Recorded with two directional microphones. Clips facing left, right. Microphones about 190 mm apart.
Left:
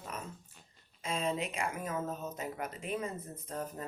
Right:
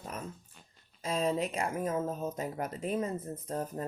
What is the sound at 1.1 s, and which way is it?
Speech, 35° right (ahead or behind).